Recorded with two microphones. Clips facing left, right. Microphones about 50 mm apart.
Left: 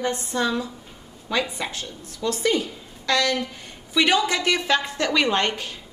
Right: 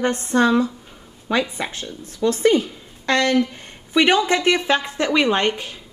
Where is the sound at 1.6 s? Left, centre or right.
Right.